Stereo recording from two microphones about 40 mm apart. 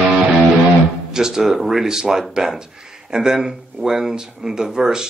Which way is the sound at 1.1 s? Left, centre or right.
Centre.